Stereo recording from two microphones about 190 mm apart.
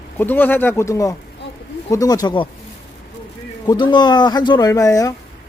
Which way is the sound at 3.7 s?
25° left (ahead or behind).